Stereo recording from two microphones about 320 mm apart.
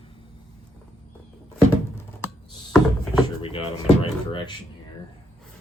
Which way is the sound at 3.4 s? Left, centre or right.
Centre.